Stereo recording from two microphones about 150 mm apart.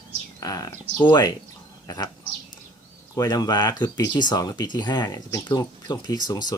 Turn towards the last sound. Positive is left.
turn(degrees=25)  # may be behind; listen again after turning